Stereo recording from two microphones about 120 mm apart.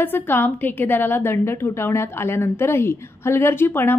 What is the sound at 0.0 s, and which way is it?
A woman's voice, 15° left (ahead or behind).